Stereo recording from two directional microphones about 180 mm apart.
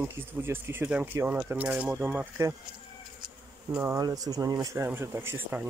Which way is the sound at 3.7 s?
15° right (ahead or behind).